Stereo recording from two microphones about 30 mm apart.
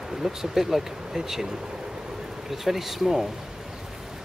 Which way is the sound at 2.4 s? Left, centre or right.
Centre.